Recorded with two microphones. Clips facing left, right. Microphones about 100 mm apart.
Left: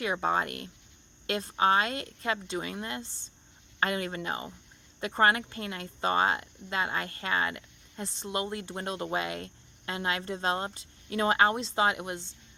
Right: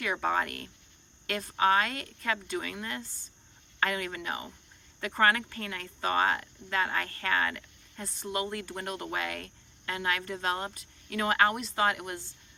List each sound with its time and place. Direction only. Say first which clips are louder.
0.0 s speech: left 1 dB; 25° left (ahead or behind)